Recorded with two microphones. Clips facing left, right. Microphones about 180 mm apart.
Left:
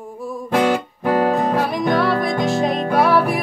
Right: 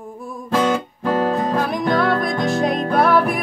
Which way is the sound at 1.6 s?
Centre (ahead or behind).